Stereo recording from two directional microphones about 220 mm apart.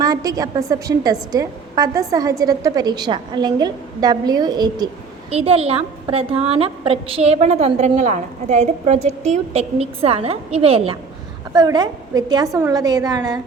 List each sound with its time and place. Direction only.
0.0 s a woman's voice: 15° right (ahead or behind)